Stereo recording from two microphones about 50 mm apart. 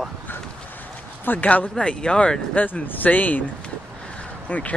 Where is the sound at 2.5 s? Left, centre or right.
Left.